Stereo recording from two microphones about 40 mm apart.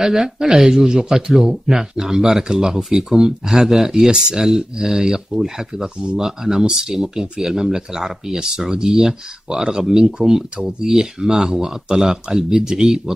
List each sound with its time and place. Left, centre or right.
0.0 s speech: centre
10.9 s speech: centre